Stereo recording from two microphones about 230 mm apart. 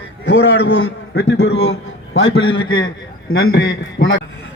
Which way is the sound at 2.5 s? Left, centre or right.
Centre.